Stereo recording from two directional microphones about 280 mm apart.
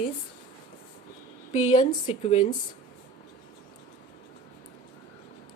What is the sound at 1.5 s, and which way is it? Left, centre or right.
Speech, left.